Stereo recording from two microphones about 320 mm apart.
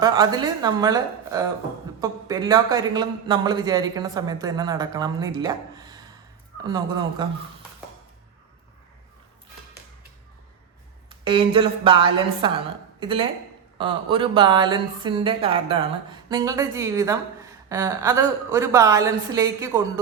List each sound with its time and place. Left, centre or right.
0.0 s a man's voice: centre
11.1 s a man's voice: centre